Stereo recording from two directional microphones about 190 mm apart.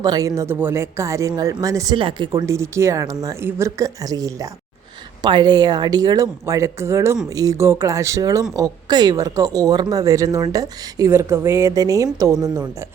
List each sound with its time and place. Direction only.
0.0 s speech: 20° right (ahead or behind)